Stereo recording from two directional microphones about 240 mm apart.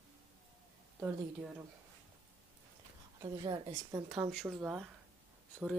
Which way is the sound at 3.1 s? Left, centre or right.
Centre.